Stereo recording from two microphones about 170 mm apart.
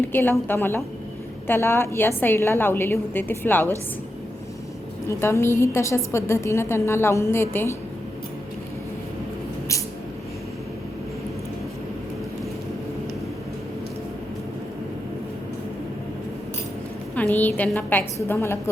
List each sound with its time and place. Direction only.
0.1 s a woman's voice: 10° left (ahead or behind)
5.0 s a woman's voice: 15° left (ahead or behind)
17.2 s a woman's voice: 10° left (ahead or behind)